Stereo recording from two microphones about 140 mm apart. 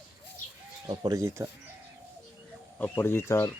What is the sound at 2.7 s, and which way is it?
Speech, 15° left (ahead or behind).